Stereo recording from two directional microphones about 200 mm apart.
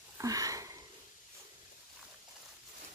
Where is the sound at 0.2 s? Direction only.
15° right (ahead or behind).